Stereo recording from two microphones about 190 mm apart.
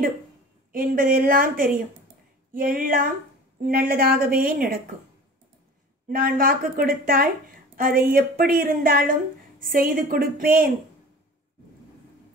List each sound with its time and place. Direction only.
0.7 s a woman's voice: 50° right (ahead or behind)
6.0 s a woman's voice: 50° right (ahead or behind)